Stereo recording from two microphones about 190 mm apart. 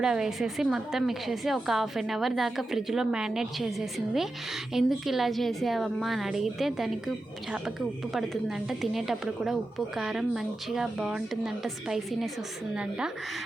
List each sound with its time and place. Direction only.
0.0 s a woman's voice: 5° right (ahead or behind)
8.1 s a woman's voice: centre (ahead or behind)